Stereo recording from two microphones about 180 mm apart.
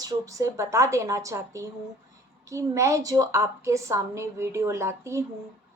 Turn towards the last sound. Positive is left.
turn(degrees=-15)  # may be behind; listen again after turning